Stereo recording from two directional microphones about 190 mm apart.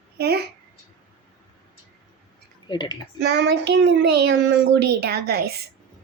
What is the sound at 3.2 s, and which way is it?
A child's voice, 65° right (ahead or behind).